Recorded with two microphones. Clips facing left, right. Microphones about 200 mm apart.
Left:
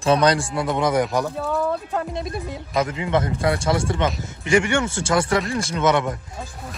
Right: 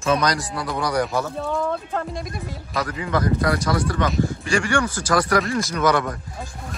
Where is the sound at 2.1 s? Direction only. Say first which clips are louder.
Left 3 dB; 25° left (ahead or behind).